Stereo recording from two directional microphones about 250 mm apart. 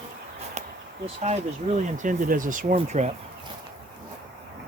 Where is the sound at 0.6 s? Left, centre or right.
Right.